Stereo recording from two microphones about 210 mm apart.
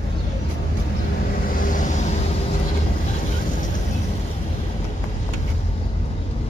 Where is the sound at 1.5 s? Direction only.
40° left (ahead or behind).